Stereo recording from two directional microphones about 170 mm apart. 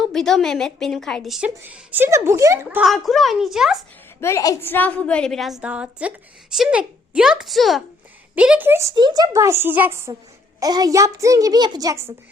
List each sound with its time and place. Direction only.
0.0 s a woman's voice: centre (ahead or behind); by 2.6 s 15° right (ahead or behind)
2.6 s a woman's voice: centre (ahead or behind)
4.2 s a woman's voice: 15° left (ahead or behind); by 10.0 s 10° right (ahead or behind)
10.6 s a child's voice: 20° right (ahead or behind)